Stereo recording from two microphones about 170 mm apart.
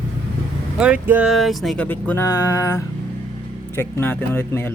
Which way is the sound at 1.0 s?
10° right (ahead or behind).